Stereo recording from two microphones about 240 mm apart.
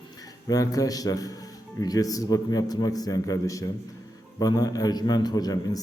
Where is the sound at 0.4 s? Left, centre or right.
Centre.